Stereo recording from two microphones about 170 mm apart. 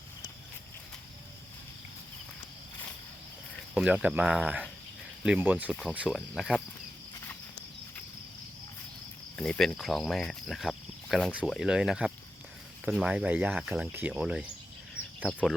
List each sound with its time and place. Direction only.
3.8 s speech: 5° right (ahead or behind)
9.3 s speech: 5° left (ahead or behind)